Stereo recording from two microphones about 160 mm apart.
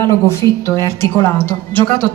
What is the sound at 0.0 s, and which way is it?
A woman's voice, 15° left (ahead or behind).